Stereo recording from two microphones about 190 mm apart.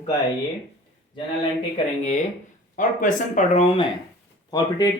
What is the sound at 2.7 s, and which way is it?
Speech, 45° left (ahead or behind).